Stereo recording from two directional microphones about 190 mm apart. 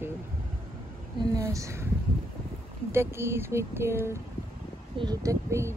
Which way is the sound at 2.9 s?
15° right (ahead or behind).